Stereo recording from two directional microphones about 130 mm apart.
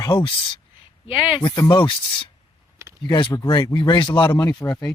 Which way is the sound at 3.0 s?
35° left (ahead or behind).